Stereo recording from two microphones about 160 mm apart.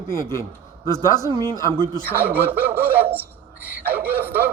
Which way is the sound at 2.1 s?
10° right (ahead or behind).